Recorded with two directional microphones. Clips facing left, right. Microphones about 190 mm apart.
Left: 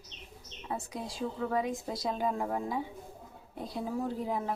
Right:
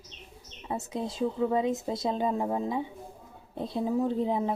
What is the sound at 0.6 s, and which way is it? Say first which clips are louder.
A woman's voice: right 5 dB; 25° right (ahead or behind).